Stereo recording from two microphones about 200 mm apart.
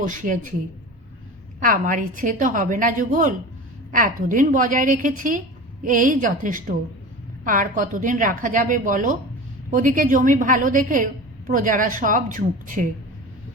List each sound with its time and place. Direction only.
0.0 s a woman's voice: 40° right (ahead or behind)
1.5 s a woman's voice: 40° right (ahead or behind)